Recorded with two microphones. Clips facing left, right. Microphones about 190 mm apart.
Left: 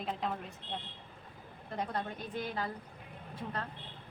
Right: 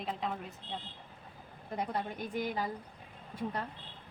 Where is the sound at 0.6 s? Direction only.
65° left (ahead or behind).